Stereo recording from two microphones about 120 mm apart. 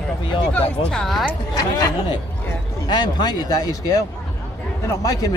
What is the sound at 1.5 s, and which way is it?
Speech, 30° left (ahead or behind).